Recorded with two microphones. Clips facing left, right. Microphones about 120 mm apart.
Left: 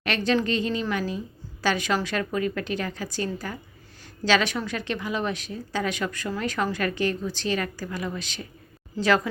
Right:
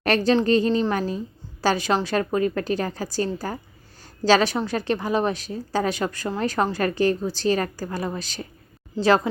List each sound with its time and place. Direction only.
0.0 s a woman's voice: 40° right (ahead or behind)